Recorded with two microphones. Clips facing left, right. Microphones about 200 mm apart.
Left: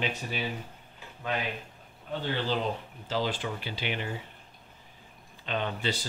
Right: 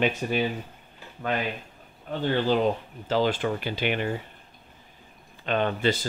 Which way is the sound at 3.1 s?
55° right (ahead or behind).